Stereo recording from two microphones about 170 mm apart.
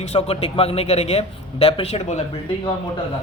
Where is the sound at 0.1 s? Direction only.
35° left (ahead or behind).